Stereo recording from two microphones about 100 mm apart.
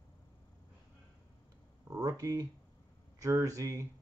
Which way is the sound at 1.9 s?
35° right (ahead or behind).